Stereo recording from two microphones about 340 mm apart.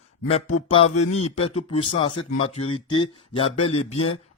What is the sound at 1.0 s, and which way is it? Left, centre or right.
Speech, left.